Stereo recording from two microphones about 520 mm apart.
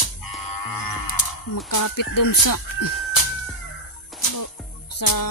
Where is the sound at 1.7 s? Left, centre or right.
Left.